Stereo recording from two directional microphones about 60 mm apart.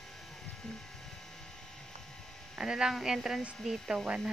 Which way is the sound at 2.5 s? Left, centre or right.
Centre.